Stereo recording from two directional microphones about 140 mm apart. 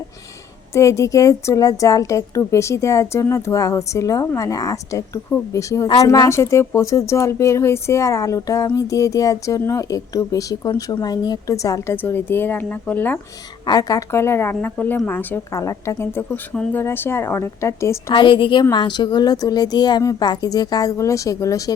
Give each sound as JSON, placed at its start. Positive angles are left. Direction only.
{"t": 0.7, "sound": "a woman's voice", "side_deg": 20}
{"t": 13.7, "sound": "speech", "side_deg": 25}
{"t": 18.1, "sound": "a woman's voice", "side_deg": 35}